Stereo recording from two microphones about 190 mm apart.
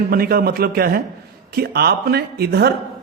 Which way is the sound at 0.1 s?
50° right (ahead or behind).